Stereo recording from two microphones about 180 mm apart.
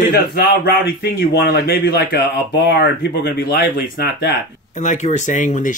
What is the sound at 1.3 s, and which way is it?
Speech, 65° left (ahead or behind).